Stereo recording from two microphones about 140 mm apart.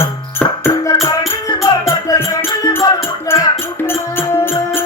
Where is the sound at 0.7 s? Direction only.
35° left (ahead or behind).